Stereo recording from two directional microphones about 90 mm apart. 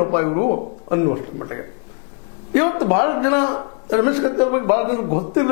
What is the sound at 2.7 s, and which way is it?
A man's voice, 20° left (ahead or behind).